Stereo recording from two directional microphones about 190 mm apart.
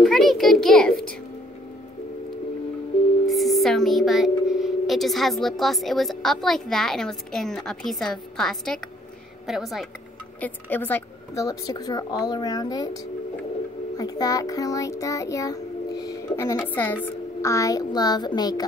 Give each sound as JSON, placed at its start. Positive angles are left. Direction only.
{"t": 0.0, "sound": "a child's voice", "side_deg": 0}
{"t": 3.3, "sound": "a woman's voice", "side_deg": 0}
{"t": 10.4, "sound": "a woman's voice", "side_deg": 10}
{"t": 13.9, "sound": "child singing", "side_deg": 20}
{"t": 16.5, "sound": "a woman's voice", "side_deg": 10}